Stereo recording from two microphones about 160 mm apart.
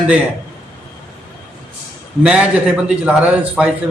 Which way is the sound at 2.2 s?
10° right (ahead or behind).